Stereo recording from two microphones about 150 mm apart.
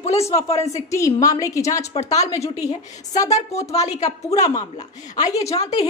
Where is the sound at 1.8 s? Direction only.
45° left (ahead or behind).